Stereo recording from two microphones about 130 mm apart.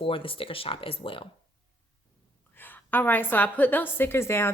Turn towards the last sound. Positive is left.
turn(degrees=20)  # may be behind; listen again after turning